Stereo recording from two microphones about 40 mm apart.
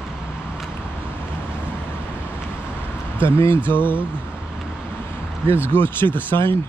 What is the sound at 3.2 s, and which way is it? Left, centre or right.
Speech, left.